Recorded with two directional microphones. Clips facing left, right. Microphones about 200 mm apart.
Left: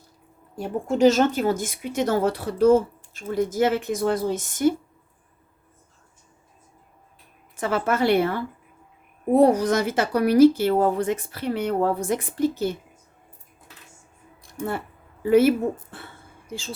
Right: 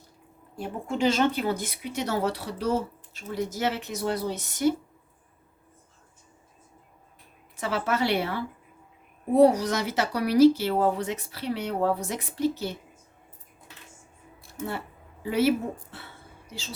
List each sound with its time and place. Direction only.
0.5 s speech: 45° left (ahead or behind)
7.5 s speech: 50° left (ahead or behind)
14.6 s speech: 55° left (ahead or behind)